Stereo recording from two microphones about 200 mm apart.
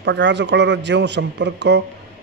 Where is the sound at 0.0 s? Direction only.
60° right (ahead or behind).